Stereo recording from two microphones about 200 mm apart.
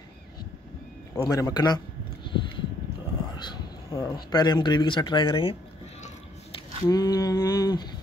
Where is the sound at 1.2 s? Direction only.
20° left (ahead or behind).